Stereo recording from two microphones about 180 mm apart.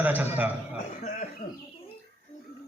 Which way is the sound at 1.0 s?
50° left (ahead or behind).